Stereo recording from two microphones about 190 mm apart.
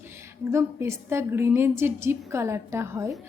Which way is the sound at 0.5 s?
15° right (ahead or behind).